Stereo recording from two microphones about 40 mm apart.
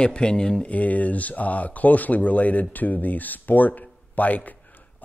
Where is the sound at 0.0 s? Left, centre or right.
Left.